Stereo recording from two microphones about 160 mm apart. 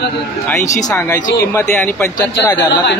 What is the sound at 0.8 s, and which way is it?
Speech, 20° left (ahead or behind).